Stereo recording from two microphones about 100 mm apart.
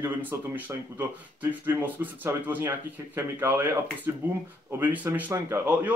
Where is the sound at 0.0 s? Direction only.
25° right (ahead or behind).